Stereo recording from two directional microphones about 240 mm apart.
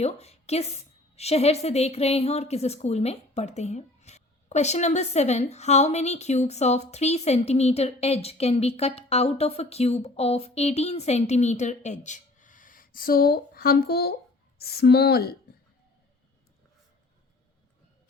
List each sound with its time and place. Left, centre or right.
0.0 s a woman's voice: left